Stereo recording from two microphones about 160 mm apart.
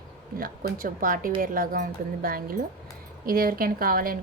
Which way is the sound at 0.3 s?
60° right (ahead or behind).